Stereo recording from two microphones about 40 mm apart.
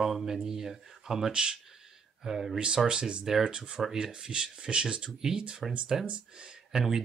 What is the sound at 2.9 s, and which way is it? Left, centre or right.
Speech, right.